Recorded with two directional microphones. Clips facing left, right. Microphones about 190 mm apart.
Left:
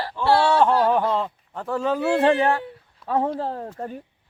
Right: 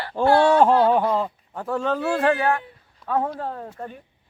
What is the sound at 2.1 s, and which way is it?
Speech, 25° left (ahead or behind).